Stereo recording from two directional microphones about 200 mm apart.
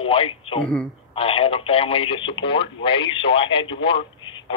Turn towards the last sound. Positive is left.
turn(degrees=25)  # may be behind; listen again after turning